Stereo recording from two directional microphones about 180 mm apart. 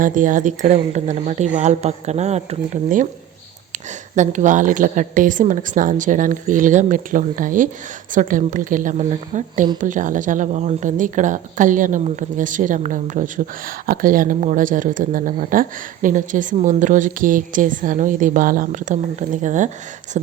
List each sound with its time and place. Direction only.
0.0 s a woman's voice: 45° right (ahead or behind)
4.1 s a woman's voice: 45° right (ahead or behind)